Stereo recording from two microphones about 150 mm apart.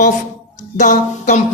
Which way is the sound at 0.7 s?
55° left (ahead or behind).